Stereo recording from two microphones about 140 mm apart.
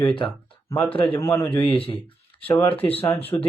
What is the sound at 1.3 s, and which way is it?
Speech, 15° left (ahead or behind).